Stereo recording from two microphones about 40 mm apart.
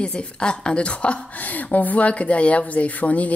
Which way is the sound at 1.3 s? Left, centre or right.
Left.